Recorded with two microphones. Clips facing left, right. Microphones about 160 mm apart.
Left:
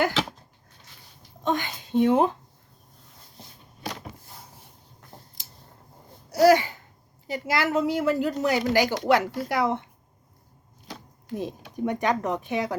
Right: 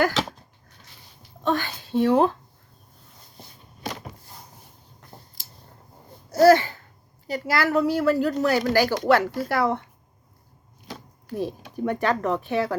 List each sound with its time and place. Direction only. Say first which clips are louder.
1.5 s a woman's voice: right 2 dB; 20° left (ahead or behind)
6.3 s a sound: right 2 dB; 10° left (ahead or behind)
7.3 s a woman's voice: right 2 dB; 20° left (ahead or behind)
11.3 s speech: right 3 dB; 20° left (ahead or behind)